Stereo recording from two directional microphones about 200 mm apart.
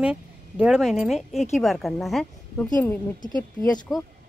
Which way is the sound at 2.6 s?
20° left (ahead or behind).